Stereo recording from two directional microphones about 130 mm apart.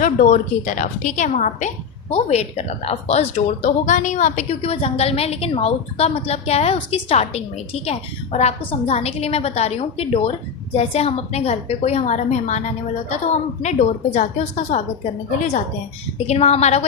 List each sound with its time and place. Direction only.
0.0 s a woman's voice: 80° left; by 14.8 s 60° left (ahead or behind)
16.2 s a woman's voice: 55° left (ahead or behind)